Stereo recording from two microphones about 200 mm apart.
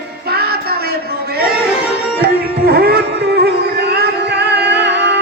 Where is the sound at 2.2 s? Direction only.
50° right (ahead or behind).